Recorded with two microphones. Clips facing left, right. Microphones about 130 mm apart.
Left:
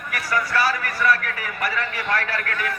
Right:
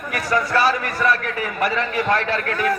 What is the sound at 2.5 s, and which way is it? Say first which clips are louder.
Speech: right 7 dB; 35° right (ahead or behind).